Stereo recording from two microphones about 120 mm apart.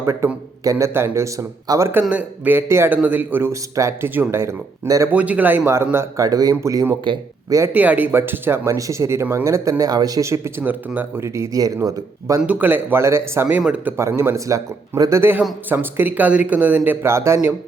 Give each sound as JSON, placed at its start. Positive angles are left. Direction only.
{"t": 0.0, "sound": "a man's voice", "side_deg": -25}
{"t": 1.9, "sound": "a man's voice", "side_deg": -15}
{"t": 5.1, "sound": "a man's voice", "side_deg": -10}
{"t": 7.7, "sound": "a man's voice", "side_deg": -15}
{"t": 12.4, "sound": "speech", "side_deg": -15}
{"t": 13.6, "sound": "speech", "side_deg": -10}
{"t": 13.9, "sound": "a man's voice", "side_deg": -20}
{"t": 15.2, "sound": "speech", "side_deg": -15}